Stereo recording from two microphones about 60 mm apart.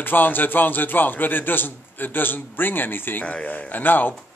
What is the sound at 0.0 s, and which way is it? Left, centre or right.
A man's voice, left.